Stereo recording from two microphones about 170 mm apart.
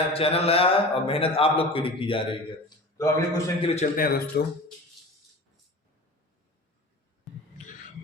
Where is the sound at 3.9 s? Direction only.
60° left (ahead or behind).